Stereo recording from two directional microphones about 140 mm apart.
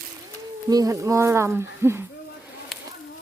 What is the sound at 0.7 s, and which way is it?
Speech, 25° right (ahead or behind).